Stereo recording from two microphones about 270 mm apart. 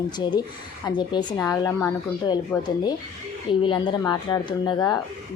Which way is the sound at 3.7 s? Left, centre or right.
Centre.